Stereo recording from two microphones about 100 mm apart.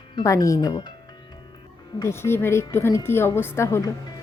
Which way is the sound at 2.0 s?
25° left (ahead or behind).